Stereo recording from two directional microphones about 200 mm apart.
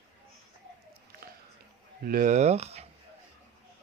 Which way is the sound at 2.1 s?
45° right (ahead or behind).